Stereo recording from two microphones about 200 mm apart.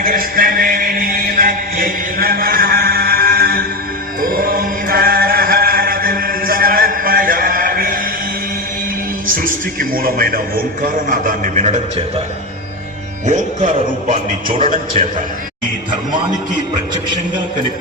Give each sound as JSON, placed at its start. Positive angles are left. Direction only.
{"t": 0.0, "sound": "a sound", "side_deg": -45}
{"t": 4.2, "sound": "chant", "side_deg": -45}
{"t": 9.2, "sound": "music", "side_deg": -45}
{"t": 11.1, "sound": "a man's voice", "side_deg": -40}
{"t": 13.2, "sound": "a man's voice", "side_deg": -35}